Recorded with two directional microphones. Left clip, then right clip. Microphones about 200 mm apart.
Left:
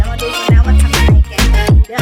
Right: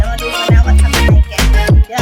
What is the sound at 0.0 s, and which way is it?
Music, centre (ahead or behind).